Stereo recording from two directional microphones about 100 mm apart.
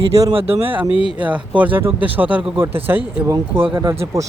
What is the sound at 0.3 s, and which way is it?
Speech, 70° right (ahead or behind).